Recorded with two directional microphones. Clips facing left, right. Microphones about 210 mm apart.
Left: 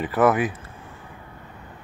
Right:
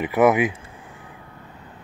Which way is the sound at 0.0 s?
10° right (ahead or behind).